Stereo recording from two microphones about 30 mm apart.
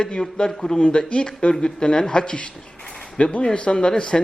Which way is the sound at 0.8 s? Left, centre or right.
Left.